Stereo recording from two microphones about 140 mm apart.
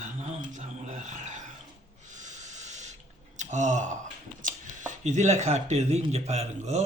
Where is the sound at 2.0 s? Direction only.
60° right (ahead or behind).